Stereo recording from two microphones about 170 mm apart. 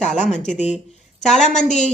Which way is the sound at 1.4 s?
45° left (ahead or behind).